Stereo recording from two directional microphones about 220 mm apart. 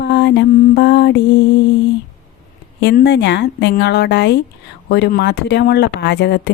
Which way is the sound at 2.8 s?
50° left (ahead or behind).